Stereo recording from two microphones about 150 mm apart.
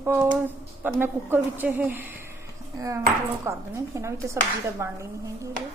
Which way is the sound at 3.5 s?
20° right (ahead or behind).